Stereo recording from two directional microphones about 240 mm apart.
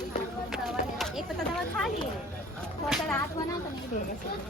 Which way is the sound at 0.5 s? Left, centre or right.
Centre.